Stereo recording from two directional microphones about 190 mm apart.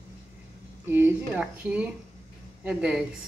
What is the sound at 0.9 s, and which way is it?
A woman's voice, 10° right (ahead or behind).